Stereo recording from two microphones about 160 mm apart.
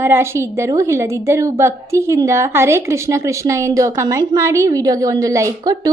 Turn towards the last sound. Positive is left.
turn(degrees=-20)  # may be behind; listen again after turning